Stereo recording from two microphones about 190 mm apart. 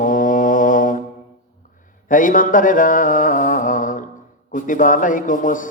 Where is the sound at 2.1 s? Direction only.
45° left (ahead or behind).